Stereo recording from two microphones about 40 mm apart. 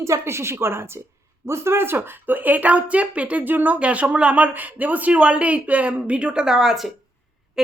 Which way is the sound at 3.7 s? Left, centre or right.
Right.